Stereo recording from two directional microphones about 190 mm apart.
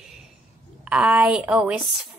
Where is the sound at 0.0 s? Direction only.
Centre (ahead or behind).